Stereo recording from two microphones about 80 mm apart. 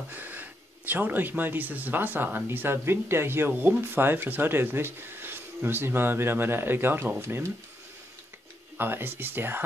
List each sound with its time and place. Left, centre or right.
0.1 s speech: right
8.7 s speech: right